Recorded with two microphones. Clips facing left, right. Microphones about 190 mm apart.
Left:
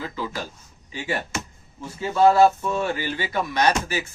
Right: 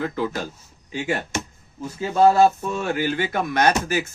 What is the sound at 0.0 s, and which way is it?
Speech, 60° right (ahead or behind).